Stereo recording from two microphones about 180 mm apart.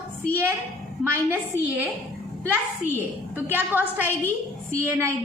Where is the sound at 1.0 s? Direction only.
15° right (ahead or behind).